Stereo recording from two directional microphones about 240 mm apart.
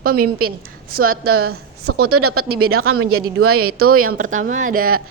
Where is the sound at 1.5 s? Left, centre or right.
Right.